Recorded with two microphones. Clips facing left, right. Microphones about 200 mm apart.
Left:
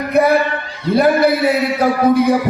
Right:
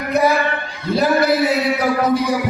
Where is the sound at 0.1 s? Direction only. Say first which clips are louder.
Left 3 dB; 55° left (ahead or behind).